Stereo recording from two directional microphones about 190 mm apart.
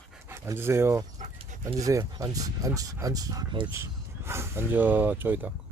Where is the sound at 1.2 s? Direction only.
40° right (ahead or behind).